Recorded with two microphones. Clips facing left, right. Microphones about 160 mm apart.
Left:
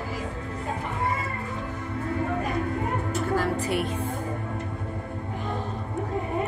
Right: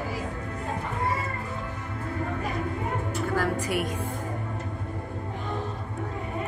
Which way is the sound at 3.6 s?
10° right (ahead or behind).